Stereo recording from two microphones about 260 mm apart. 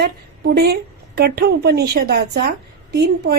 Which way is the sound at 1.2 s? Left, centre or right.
Right.